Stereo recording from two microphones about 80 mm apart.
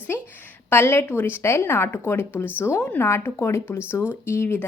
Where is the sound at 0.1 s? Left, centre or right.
Left.